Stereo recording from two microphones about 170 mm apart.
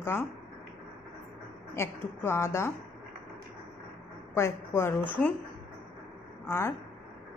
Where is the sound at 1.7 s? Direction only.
15° left (ahead or behind).